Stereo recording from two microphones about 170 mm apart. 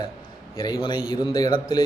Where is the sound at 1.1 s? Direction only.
25° left (ahead or behind).